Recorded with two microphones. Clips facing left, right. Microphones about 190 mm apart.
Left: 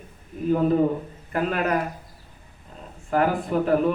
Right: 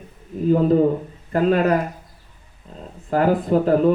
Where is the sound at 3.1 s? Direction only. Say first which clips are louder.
Right 5 dB; 35° right (ahead or behind).